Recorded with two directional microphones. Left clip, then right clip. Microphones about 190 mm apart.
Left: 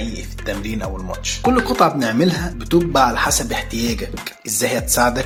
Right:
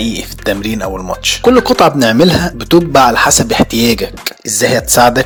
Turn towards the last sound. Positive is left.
turn(degrees=-35)  # may be behind; listen again after turning